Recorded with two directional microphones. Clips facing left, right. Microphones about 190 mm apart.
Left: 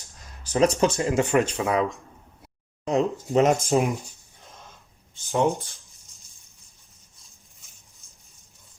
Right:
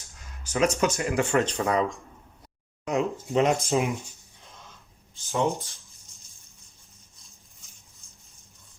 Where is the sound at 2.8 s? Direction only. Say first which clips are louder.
Left 3 dB; 35° left (ahead or behind).